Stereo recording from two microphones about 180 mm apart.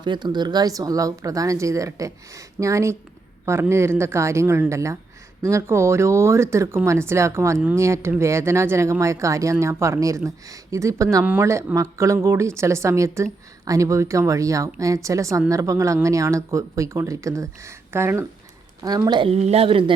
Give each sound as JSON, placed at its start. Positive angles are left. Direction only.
{"t": 0.0, "sound": "a woman's voice", "side_deg": -25}